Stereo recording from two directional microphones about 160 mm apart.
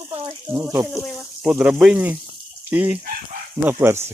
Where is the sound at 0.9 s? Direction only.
5° left (ahead or behind).